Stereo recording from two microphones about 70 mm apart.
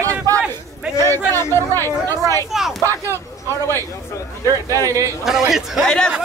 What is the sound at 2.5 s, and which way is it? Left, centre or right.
Speech, centre.